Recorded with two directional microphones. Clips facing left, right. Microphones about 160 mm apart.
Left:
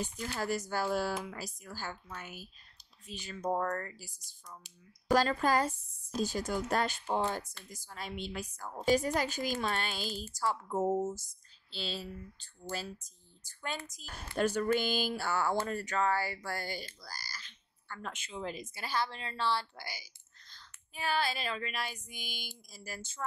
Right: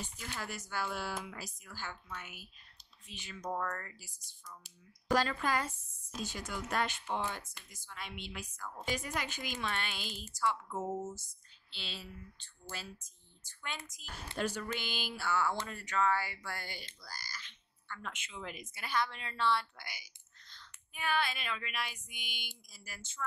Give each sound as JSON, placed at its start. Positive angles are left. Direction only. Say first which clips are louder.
{"t": 0.0, "sound": "speech", "louder": "left 7 dB", "side_deg": 40}